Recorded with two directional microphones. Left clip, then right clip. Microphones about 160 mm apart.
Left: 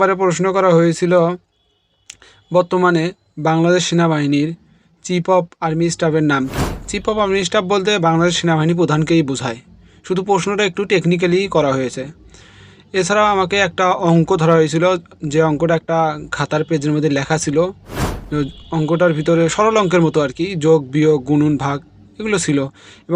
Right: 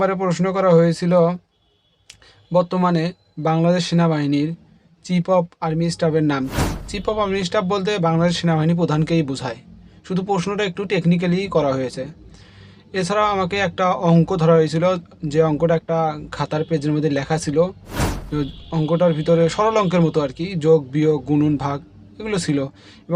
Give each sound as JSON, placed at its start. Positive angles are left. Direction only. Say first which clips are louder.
{"t": 0.0, "sound": "speech", "louder": "left 5 dB", "side_deg": 30}
{"t": 17.8, "sound": "a sound", "louder": "left 1 dB", "side_deg": 0}
{"t": 18.3, "sound": "speech", "louder": "left 4 dB", "side_deg": 30}